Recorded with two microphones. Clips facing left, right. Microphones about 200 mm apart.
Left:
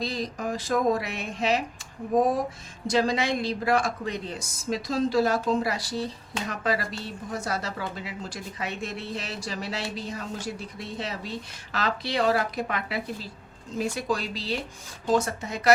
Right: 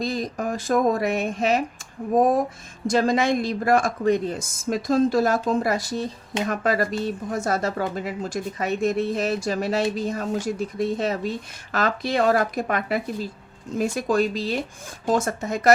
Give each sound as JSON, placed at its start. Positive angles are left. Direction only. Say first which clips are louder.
{"t": 0.0, "sound": "speech", "louder": "right 4 dB", "side_deg": -50}
{"t": 2.8, "sound": "speech", "louder": "right 4 dB", "side_deg": -50}